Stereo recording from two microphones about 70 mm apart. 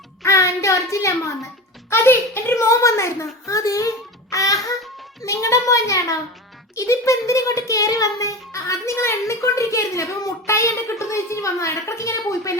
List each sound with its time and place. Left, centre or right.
0.2 s child singing: left
1.9 s a child's voice: left
4.3 s music: left
5.2 s a child's voice: left